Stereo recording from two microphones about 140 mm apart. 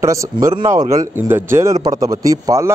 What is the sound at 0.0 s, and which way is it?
Speech, 20° right (ahead or behind).